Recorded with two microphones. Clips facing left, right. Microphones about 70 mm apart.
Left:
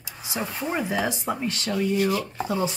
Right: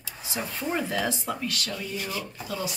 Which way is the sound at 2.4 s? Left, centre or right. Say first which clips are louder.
Left 6 dB; left.